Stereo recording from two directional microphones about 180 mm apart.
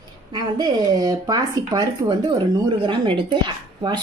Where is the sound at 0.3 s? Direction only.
25° right (ahead or behind).